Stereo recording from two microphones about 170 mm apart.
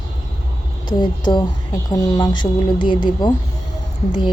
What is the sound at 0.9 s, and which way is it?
A woman's voice, 25° left (ahead or behind).